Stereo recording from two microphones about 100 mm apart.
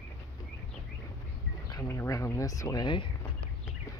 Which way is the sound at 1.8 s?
30° left (ahead or behind).